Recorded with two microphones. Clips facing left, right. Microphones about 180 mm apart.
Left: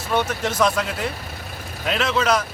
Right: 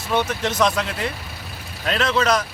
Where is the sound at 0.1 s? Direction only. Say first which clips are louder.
Even; 5° left (ahead or behind).